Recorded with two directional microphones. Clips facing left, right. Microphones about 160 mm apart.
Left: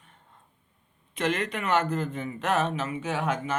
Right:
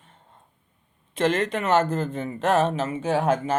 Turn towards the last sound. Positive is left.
turn(degrees=-35)  # may be behind; listen again after turning